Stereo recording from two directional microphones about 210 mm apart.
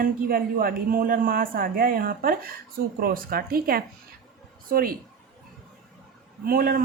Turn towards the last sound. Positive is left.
turn(degrees=-45)  # may be behind; listen again after turning